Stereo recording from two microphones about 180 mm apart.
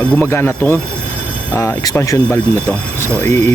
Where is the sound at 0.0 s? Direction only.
10° left (ahead or behind).